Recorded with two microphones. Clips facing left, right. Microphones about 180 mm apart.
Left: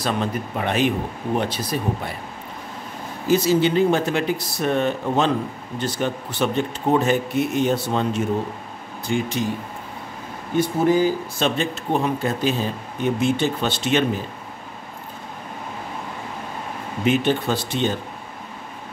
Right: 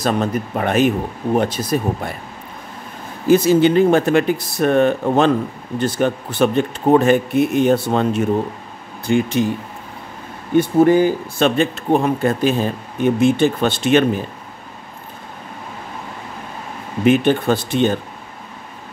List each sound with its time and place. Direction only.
0.0 s speech: 45° right (ahead or behind)
3.3 s speech: 55° right (ahead or behind)
10.6 s speech: 60° right (ahead or behind)
17.0 s speech: 55° right (ahead or behind)